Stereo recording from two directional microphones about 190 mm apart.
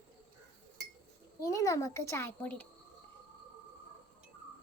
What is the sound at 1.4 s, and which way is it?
A child's voice, 15° left (ahead or behind).